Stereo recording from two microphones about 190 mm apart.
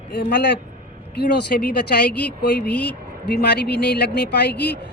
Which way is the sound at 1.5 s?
45° left (ahead or behind).